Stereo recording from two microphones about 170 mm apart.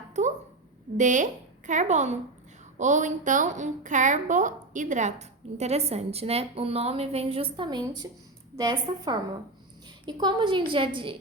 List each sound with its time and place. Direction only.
0.9 s a woman's voice: 45° right (ahead or behind); by 11.2 s 30° right (ahead or behind)